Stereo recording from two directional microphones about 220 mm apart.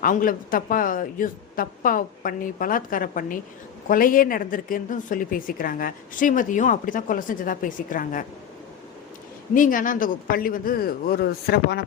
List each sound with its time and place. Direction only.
0.0 s a woman's voice: 40° left (ahead or behind)
9.6 s a woman's voice: 40° left (ahead or behind)